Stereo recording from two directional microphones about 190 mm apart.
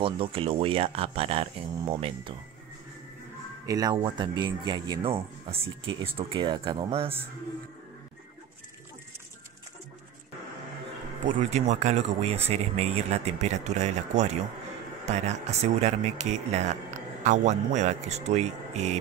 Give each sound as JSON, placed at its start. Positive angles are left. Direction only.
{"t": 0.0, "sound": "speech", "side_deg": -30}
{"t": 3.6, "sound": "speech", "side_deg": -20}
{"t": 11.3, "sound": "speech", "side_deg": -35}